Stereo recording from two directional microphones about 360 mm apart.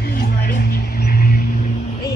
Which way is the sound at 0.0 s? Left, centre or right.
Left.